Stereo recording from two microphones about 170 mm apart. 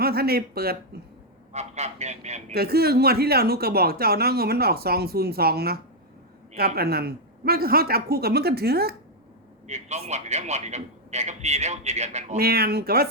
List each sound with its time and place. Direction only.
0.0 s speech: 65° right (ahead or behind)
1.5 s a man's voice: 40° right (ahead or behind)
2.6 s speech: 65° right (ahead or behind)
9.6 s a man's voice: 40° right (ahead or behind)
12.4 s speech: 65° right (ahead or behind)